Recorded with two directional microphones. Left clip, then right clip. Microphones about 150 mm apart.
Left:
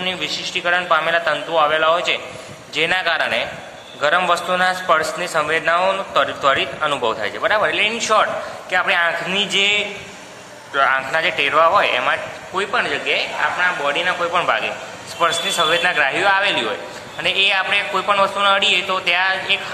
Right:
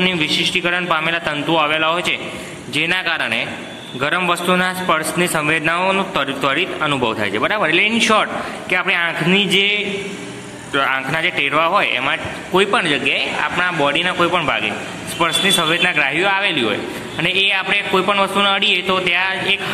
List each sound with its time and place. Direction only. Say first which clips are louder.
0.0 s a man's voice: right 6 dB; 5° right (ahead or behind)
12.5 s a man's voice: right 4 dB; 25° right (ahead or behind)
15.1 s a man's voice: right 2 dB; 10° right (ahead or behind)